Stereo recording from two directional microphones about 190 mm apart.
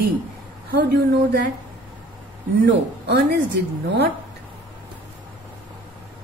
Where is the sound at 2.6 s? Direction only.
60° right (ahead or behind).